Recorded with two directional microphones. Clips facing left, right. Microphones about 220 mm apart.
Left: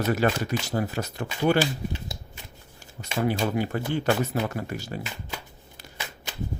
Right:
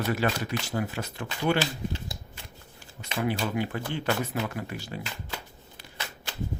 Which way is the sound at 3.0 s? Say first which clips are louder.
Left 3 dB; 40° left (ahead or behind).